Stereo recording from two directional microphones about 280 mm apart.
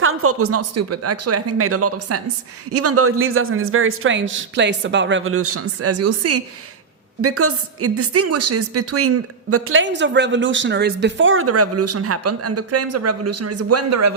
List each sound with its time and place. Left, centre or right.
0.0 s a woman's voice: right